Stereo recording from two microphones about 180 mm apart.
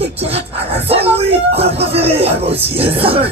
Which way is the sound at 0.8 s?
35° right (ahead or behind).